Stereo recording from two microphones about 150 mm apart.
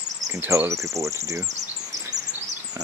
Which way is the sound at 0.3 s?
15° right (ahead or behind).